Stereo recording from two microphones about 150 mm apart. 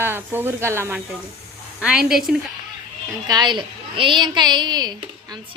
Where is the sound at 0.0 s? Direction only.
15° right (ahead or behind).